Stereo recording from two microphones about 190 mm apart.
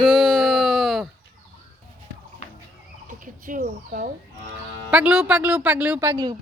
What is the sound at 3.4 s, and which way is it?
Speech, 45° right (ahead or behind).